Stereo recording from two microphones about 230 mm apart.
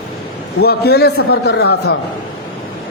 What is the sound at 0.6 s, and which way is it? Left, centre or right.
A man's voice, left.